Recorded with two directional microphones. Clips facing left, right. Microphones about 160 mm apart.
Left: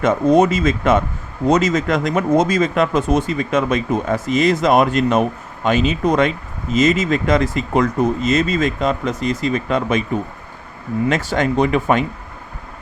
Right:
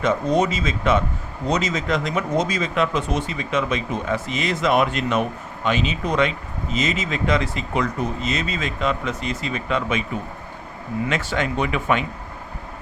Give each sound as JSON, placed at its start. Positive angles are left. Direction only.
{"t": 0.0, "sound": "speech", "side_deg": 50}
{"t": 11.1, "sound": "speech", "side_deg": 40}